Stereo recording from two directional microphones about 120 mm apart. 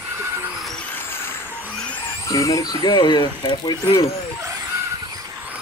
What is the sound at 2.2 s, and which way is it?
Speech, 25° left (ahead or behind).